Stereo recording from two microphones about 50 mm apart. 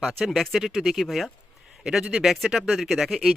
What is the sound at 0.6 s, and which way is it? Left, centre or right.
Speech, centre.